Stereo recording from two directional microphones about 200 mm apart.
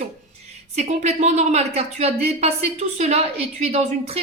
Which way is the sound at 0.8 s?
35° right (ahead or behind).